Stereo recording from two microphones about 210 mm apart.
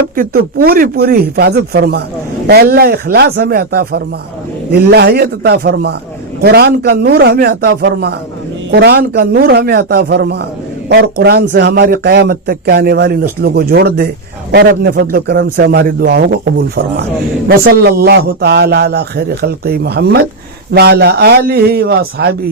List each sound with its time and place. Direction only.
0.2 s a man's voice: 45° right (ahead or behind)